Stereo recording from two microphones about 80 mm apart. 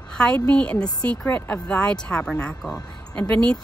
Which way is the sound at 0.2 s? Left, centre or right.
Centre.